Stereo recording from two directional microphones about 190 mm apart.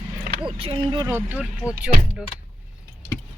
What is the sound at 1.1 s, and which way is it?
Speech, 5° right (ahead or behind).